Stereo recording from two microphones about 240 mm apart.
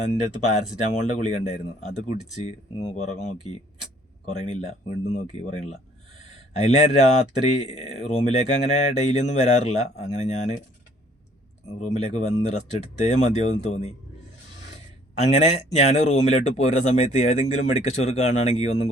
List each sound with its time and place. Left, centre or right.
0.8 s speech: left
11.7 s speech: left
15.2 s speech: left